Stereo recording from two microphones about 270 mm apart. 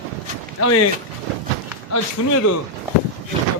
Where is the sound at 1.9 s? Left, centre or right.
Left.